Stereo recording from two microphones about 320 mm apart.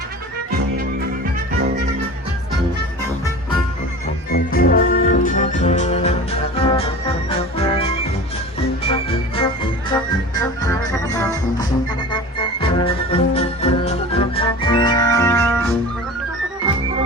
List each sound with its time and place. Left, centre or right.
4.3 s music: left; by 15.7 s centre